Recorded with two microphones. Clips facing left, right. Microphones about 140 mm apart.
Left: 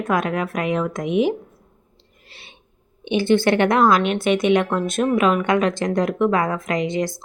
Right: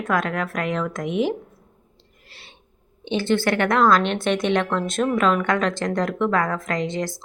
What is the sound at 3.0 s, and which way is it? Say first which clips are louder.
A woman's voice: left 4 dB; 15° left (ahead or behind).